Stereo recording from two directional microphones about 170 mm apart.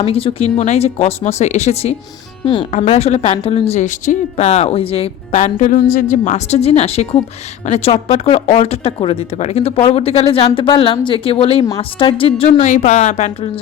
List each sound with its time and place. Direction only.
0.0 s a woman's voice: 35° left (ahead or behind)
12.5 s a woman's voice: 45° left (ahead or behind)